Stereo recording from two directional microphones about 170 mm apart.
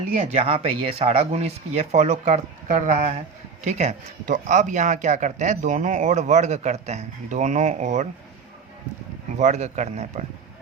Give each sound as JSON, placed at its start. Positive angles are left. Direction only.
{"t": 0.3, "sound": "speech", "side_deg": -35}
{"t": 9.4, "sound": "speech", "side_deg": -45}